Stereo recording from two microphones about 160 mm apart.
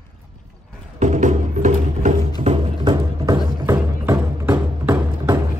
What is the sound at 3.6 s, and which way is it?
Music, 15° right (ahead or behind).